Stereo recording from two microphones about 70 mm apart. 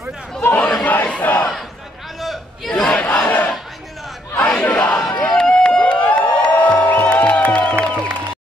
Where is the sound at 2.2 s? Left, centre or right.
Centre.